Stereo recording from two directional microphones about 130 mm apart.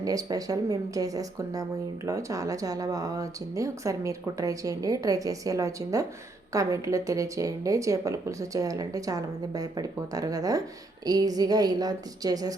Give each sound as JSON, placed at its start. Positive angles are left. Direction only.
{"t": 0.0, "sound": "speech", "side_deg": -30}